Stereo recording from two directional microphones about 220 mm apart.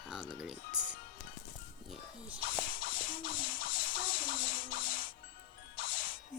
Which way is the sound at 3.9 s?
60° left (ahead or behind).